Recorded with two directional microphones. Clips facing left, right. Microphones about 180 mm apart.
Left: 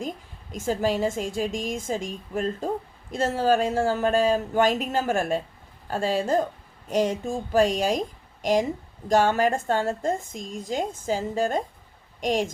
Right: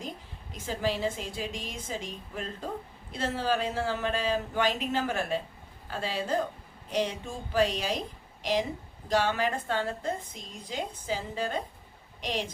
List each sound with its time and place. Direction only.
0.5 s a woman's voice: 45° left (ahead or behind)